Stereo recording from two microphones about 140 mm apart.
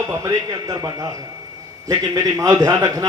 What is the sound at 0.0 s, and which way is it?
A man's voice, 25° right (ahead or behind).